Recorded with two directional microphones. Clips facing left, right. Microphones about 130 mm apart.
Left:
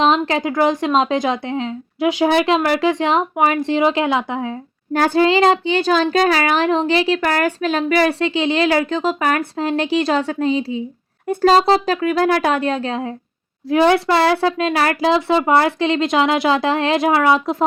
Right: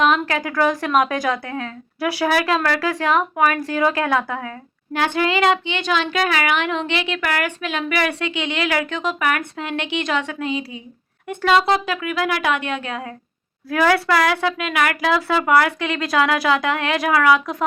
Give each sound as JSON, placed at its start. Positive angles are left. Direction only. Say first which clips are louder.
{"t": 0.0, "sound": "speech", "louder": "left 3 dB", "side_deg": 25}
{"t": 4.9, "sound": "speech", "louder": "left 5 dB", "side_deg": 35}